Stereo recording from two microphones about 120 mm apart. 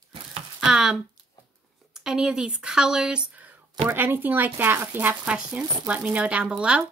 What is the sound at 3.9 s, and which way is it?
Speech, 20° right (ahead or behind).